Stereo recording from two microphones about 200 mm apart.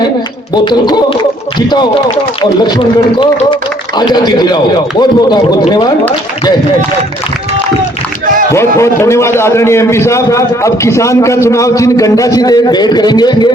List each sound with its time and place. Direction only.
0.5 s speech: 20° left (ahead or behind)
8.5 s a man's voice: 15° left (ahead or behind)